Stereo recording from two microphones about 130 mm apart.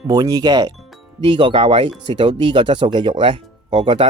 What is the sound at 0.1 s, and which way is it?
Speech, 30° right (ahead or behind).